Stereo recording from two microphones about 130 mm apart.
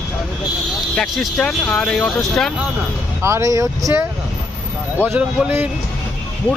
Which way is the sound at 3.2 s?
25° right (ahead or behind).